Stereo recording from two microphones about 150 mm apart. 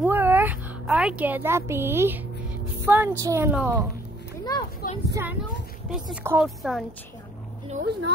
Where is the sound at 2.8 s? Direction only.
15° right (ahead or behind).